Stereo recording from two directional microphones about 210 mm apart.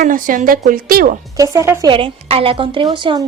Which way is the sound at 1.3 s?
15° right (ahead or behind).